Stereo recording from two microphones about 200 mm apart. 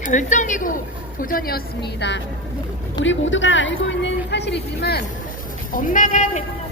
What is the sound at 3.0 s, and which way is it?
A woman's voice, 70° left (ahead or behind).